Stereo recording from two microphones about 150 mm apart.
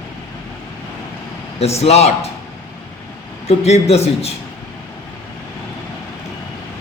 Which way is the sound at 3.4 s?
45° left (ahead or behind).